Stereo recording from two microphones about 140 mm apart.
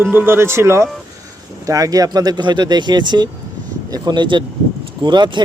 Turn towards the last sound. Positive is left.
turn(degrees=-35)  # may be behind; listen again after turning